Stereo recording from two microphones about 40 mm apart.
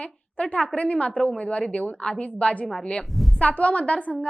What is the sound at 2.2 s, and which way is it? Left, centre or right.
Speech, left.